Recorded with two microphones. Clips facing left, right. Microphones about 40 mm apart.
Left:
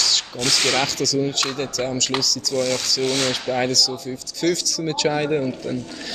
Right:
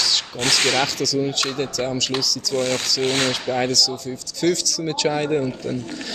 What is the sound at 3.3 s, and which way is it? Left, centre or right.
A man's voice, centre.